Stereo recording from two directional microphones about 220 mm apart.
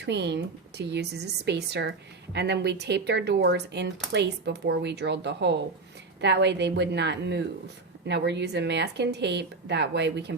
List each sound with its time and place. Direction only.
0.0 s speech: 50° right (ahead or behind)